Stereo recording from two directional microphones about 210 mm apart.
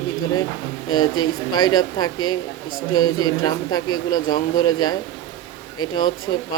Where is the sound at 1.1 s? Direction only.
20° left (ahead or behind).